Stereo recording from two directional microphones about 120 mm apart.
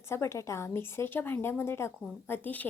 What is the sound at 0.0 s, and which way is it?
A woman's voice, 20° left (ahead or behind).